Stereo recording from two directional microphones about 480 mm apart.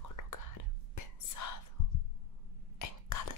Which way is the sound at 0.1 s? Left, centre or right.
Left.